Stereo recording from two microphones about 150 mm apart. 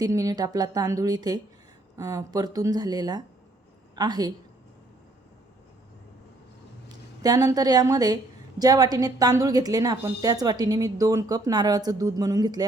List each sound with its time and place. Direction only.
0.0 s a woman's voice: 25° right (ahead or behind)
6.8 s a woman's voice: 25° right (ahead or behind)